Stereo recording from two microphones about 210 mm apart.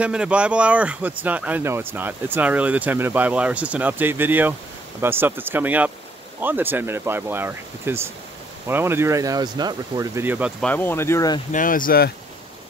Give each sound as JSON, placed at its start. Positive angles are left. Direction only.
{"t": 0.0, "sound": "speech", "side_deg": -5}
{"t": 10.6, "sound": "speech", "side_deg": 10}
{"t": 11.5, "sound": "speech", "side_deg": 40}